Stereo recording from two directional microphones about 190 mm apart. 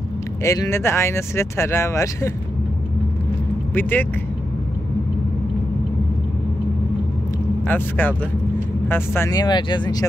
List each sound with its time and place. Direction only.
0.4 s speech: 15° left (ahead or behind)
3.7 s speech: 10° left (ahead or behind)
7.6 s speech: 10° left (ahead or behind)